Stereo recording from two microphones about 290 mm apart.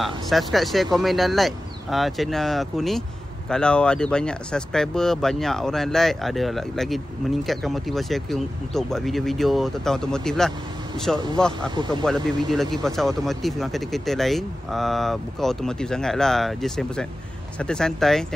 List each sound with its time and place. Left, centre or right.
0.0 s speech: centre
11.7 s speech: centre
12.0 s speech: centre